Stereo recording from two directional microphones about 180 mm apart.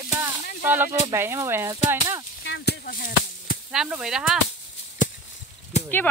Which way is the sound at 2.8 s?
50° left (ahead or behind).